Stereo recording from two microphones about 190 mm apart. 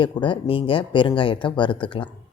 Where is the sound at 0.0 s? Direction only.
25° left (ahead or behind).